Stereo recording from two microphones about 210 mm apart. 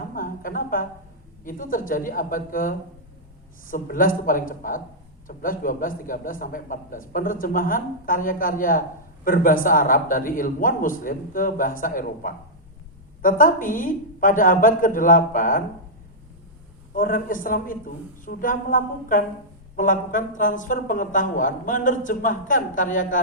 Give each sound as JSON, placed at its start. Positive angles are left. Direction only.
{"t": 0.1, "sound": "a sound", "side_deg": 40}
{"t": 1.5, "sound": "a man's voice", "side_deg": 40}
{"t": 16.9, "sound": "a man's voice", "side_deg": 40}